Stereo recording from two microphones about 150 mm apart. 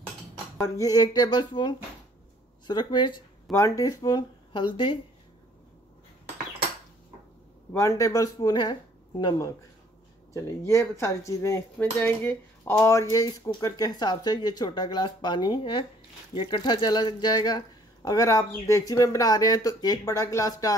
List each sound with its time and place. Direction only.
0.6 s speech: 20° left (ahead or behind)
7.7 s speech: 20° left (ahead or behind)
13.6 s speech: 25° left (ahead or behind)